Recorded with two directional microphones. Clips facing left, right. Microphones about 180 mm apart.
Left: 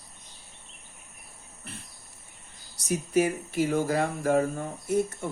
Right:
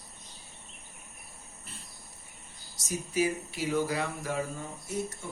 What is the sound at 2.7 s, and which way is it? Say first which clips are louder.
Speech: left 6 dB; 60° left (ahead or behind).